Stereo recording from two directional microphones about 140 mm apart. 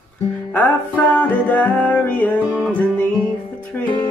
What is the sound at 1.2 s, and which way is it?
Music, 10° left (ahead or behind).